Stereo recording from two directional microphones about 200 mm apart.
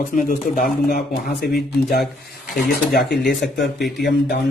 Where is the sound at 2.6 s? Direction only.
50° left (ahead or behind).